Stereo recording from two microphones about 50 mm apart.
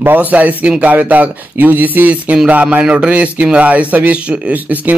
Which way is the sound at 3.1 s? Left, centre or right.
Right.